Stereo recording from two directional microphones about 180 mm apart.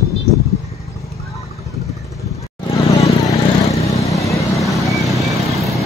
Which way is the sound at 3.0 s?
20° left (ahead or behind).